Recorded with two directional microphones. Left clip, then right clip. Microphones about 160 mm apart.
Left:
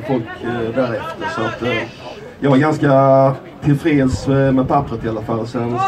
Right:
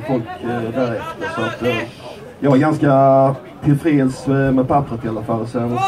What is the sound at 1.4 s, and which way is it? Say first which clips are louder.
Speech: right 1 dB; 40° right (ahead or behind).